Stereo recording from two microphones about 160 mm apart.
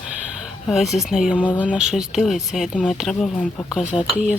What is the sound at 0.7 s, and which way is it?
Music, centre (ahead or behind).